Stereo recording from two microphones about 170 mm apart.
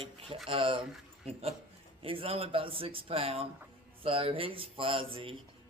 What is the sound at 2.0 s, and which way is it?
Speech, 35° right (ahead or behind).